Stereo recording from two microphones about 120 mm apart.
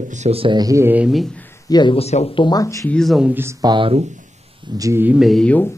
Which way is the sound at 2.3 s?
35° left (ahead or behind).